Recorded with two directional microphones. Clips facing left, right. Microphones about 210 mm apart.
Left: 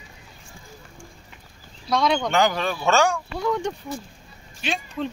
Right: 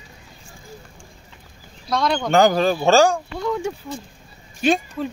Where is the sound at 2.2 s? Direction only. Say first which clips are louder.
Right 6 dB; 45° right (ahead or behind).